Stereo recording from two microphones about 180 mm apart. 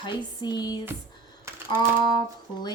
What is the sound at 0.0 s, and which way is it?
Female singing, 25° left (ahead or behind).